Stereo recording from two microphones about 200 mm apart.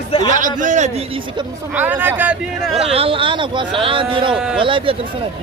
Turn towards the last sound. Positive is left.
turn(degrees=-25)  # may be behind; listen again after turning